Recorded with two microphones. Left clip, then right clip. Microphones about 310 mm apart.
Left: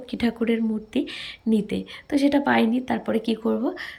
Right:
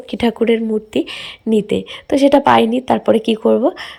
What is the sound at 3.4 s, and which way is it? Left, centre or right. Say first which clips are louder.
Speech: right 16 dB; right.